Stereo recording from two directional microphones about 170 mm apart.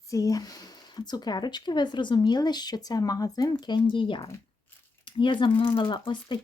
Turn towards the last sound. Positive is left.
turn(degrees=25)  # may be behind; listen again after turning